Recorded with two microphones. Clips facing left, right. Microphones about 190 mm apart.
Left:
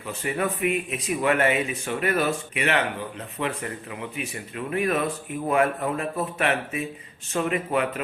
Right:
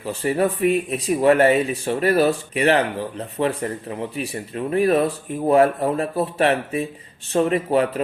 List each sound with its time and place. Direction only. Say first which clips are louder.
0.0 s speech: right 7 dB; 35° right (ahead or behind)